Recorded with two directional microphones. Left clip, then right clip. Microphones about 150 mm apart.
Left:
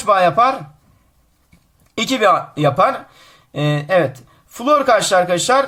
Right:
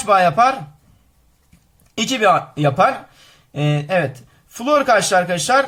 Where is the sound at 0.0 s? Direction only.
15° left (ahead or behind).